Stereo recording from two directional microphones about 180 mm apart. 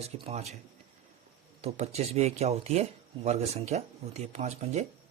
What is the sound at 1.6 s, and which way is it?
Speech, 35° right (ahead or behind).